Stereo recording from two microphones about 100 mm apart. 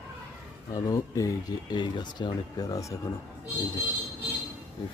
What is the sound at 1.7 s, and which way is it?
Speech, 50° left (ahead or behind).